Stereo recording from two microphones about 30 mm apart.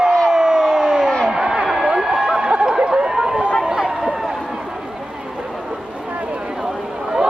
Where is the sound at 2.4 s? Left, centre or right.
Right.